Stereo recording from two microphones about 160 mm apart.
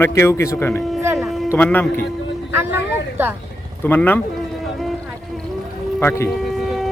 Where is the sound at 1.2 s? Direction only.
Centre (ahead or behind).